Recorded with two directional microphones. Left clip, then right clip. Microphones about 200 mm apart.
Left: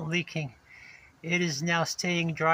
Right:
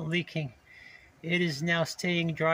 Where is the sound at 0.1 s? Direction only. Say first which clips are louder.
Left 1 dB; 15° right (ahead or behind).